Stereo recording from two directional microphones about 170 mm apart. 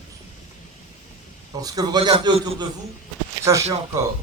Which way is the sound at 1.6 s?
25° right (ahead or behind).